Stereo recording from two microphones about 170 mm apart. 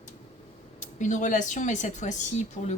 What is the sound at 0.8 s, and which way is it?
Speech, 45° left (ahead or behind).